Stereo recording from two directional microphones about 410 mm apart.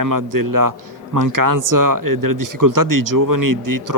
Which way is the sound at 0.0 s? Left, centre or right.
Right.